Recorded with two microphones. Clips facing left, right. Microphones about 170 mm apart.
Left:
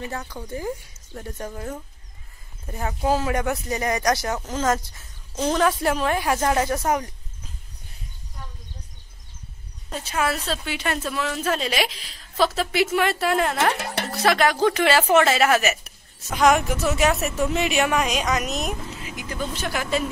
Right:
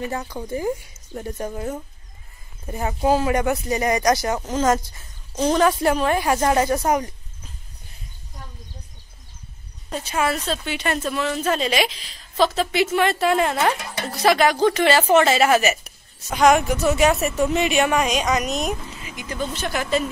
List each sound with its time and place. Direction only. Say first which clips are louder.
0.1 s a woman's voice: right 4 dB; 15° right (ahead or behind)
9.8 s a woman's voice: right 2 dB; centre (ahead or behind)
13.7 s speech: left 3 dB; 70° left (ahead or behind)
14.1 s a woman's voice: right 3 dB; centre (ahead or behind)